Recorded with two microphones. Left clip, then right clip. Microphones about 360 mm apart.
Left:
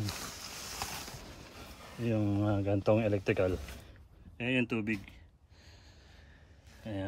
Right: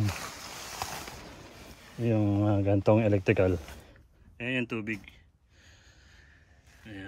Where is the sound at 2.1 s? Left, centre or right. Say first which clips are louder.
Right 5 dB; centre.